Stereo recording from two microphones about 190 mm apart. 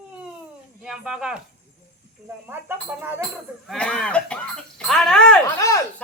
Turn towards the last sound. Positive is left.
turn(degrees=15)  # may be behind; listen again after turning